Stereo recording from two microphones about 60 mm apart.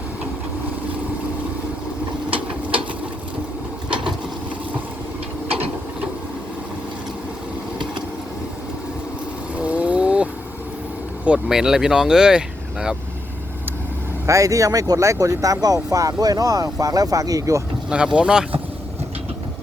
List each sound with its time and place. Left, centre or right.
9.6 s vehicle: right
11.4 s speech: centre
14.3 s speech: right
17.8 s speech: centre